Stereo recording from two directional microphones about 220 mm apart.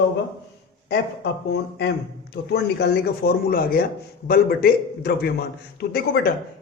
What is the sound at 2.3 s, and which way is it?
A man's voice, 45° left (ahead or behind).